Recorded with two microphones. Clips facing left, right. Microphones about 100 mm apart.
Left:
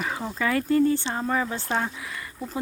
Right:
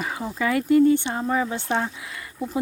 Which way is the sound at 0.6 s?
40° left (ahead or behind).